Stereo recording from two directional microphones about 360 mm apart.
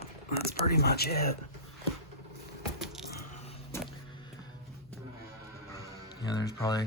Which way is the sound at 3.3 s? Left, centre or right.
Centre.